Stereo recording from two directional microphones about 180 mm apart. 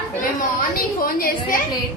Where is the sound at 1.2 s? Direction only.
55° left (ahead or behind).